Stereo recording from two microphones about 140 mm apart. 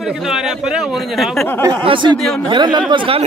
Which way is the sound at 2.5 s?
35° right (ahead or behind).